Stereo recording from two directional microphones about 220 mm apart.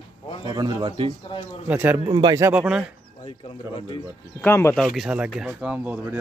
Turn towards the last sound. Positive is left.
turn(degrees=-5)  # may be behind; listen again after turning